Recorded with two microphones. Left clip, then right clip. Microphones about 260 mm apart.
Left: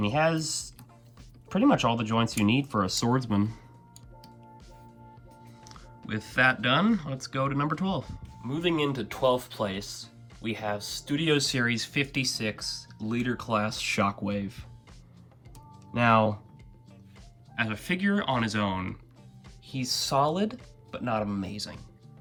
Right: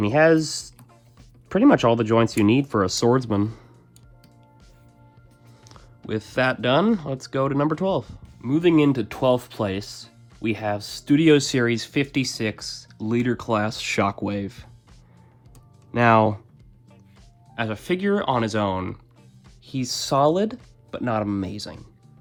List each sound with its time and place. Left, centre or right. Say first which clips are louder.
0.1 s speech: right 11 dB; right
6.1 s speech: right 2 dB; right
8.4 s speech: right 9 dB; right
15.9 s speech: right 6 dB; right
17.5 s speech: right 4 dB; centre